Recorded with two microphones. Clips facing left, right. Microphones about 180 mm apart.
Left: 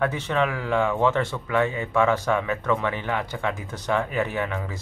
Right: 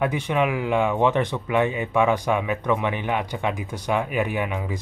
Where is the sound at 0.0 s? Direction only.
15° right (ahead or behind).